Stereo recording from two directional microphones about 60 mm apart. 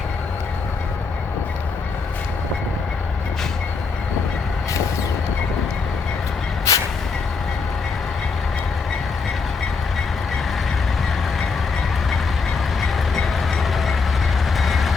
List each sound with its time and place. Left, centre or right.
6.7 s vehicle: left
12.8 s train: centre
14.6 s vehicle: centre